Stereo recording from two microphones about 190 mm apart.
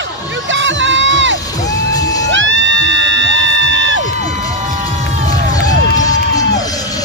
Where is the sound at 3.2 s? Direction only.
90° left.